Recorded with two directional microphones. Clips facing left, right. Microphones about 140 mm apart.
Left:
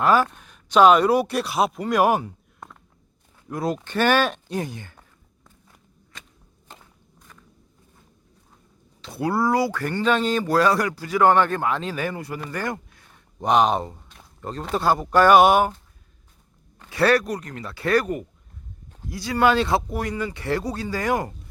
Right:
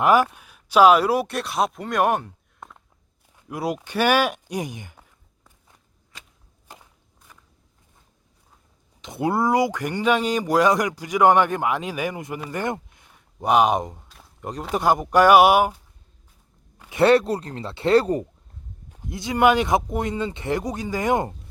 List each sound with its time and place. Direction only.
0.0 s speech: 15° right (ahead or behind); by 2.7 s centre (ahead or behind)
3.5 s speech: 10° right (ahead or behind)
6.7 s walk: 10° right (ahead or behind)
9.0 s speech: 20° right (ahead or behind)
13.1 s speech: 10° right (ahead or behind)
16.9 s speech: 20° right (ahead or behind)
18.9 s speech: 15° right (ahead or behind)